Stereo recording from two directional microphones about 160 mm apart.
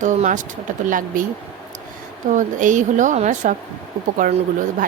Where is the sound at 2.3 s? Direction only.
55° right (ahead or behind).